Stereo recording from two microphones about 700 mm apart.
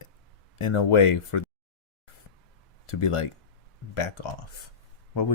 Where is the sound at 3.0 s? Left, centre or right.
Left.